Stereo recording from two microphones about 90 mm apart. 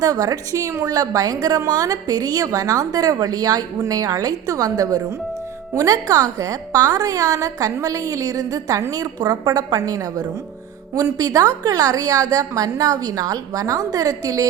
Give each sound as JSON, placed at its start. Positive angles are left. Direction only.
{"t": 0.0, "sound": "a woman's voice", "side_deg": -45}